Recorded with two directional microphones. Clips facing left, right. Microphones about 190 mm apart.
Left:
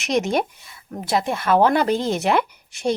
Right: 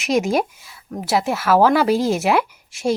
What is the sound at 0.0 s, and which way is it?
Speech, centre (ahead or behind).